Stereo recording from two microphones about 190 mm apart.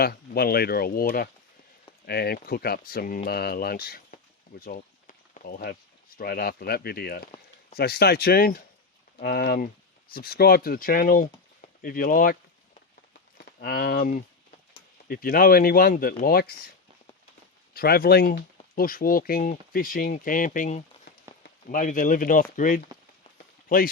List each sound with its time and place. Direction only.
0.0 s speech: 55° left (ahead or behind)
4.6 s a sound: 45° left (ahead or behind)
6.1 s speech: 55° left (ahead or behind)
13.6 s speech: 50° left (ahead or behind)
17.7 s speech: 55° left (ahead or behind)